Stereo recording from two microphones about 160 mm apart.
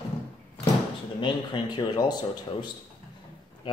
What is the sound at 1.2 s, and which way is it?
Speech, 30° left (ahead or behind).